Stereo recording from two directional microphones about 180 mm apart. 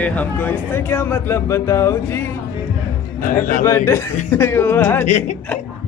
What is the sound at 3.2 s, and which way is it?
Speech, 50° left (ahead or behind).